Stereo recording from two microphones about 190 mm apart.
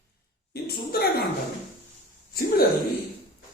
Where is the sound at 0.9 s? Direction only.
55° left (ahead or behind).